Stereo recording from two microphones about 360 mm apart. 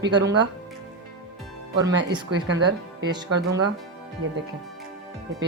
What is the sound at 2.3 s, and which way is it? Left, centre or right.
Speech, right.